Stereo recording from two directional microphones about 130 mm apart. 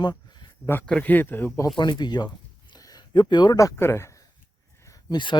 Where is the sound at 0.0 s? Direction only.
30° left (ahead or behind).